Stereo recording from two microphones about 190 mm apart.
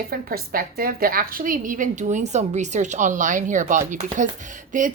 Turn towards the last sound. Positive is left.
turn(degrees=-45)  # may be behind; listen again after turning